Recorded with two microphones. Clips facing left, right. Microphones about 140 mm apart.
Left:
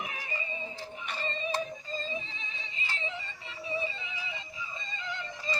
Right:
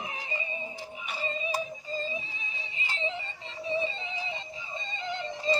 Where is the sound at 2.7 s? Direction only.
15° right (ahead or behind).